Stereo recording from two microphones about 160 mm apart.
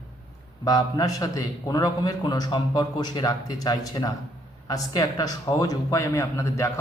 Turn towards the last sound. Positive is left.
turn(degrees=20)  # may be behind; listen again after turning